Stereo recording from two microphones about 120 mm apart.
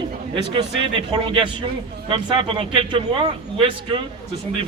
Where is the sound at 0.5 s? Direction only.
45° right (ahead or behind).